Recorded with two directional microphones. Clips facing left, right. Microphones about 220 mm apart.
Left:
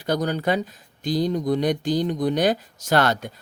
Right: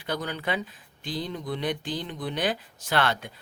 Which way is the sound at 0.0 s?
40° left (ahead or behind).